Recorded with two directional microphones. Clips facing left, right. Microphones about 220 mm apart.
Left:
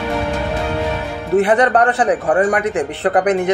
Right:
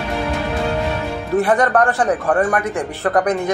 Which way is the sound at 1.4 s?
20° left (ahead or behind).